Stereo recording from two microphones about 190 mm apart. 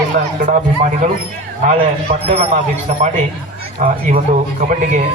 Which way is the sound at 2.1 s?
45° right (ahead or behind).